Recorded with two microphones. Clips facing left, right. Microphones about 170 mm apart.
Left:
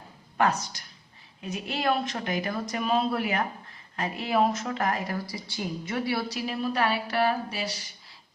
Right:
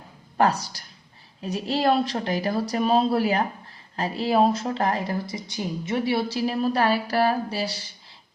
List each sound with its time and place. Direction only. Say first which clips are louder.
0.3 s a woman's voice: right 4 dB; 35° right (ahead or behind)